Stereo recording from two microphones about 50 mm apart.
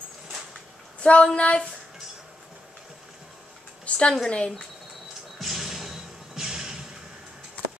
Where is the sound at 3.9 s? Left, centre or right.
Left.